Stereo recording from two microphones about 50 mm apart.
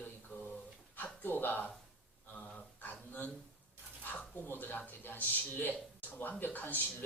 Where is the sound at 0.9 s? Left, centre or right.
Left.